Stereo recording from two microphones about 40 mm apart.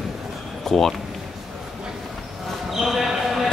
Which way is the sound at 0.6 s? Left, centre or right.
Centre.